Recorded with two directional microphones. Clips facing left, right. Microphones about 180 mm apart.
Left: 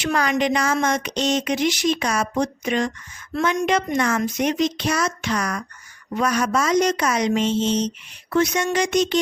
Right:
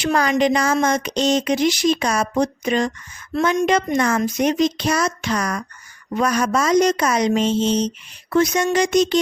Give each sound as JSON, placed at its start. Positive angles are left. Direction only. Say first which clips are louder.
{"t": 0.0, "sound": "speech", "louder": "right 3 dB", "side_deg": -35}